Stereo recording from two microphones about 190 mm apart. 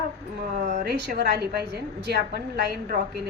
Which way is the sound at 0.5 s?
50° right (ahead or behind).